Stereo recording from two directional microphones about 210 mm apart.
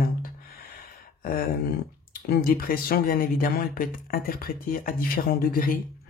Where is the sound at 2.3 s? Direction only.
45° left (ahead or behind).